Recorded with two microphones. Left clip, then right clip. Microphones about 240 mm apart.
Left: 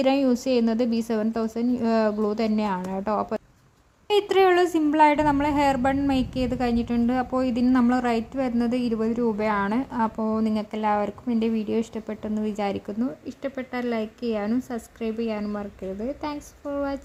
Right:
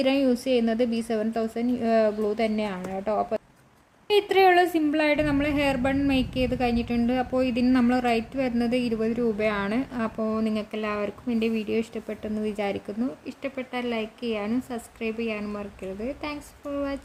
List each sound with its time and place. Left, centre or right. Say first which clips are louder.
0.0 s a woman's voice: left 1 dB; centre